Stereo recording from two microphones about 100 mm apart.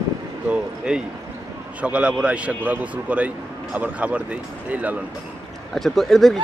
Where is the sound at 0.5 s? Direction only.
10° right (ahead or behind).